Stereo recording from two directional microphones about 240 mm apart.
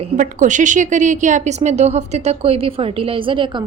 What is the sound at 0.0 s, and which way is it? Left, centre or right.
A woman's voice, right.